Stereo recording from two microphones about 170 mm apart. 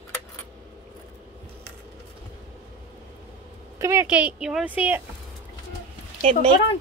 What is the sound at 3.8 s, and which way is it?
Speech, 15° right (ahead or behind).